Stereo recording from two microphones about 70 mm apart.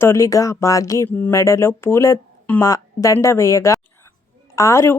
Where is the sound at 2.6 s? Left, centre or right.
Left.